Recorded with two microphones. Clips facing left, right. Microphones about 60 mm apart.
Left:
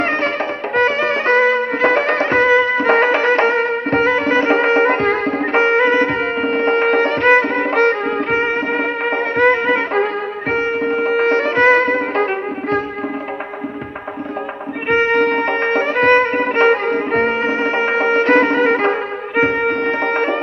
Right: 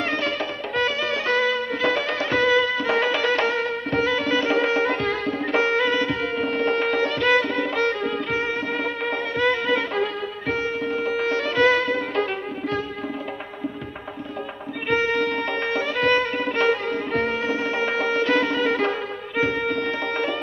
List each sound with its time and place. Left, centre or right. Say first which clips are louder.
0.0 s music: left 7 dB; left
14.9 s music: left 7 dB; left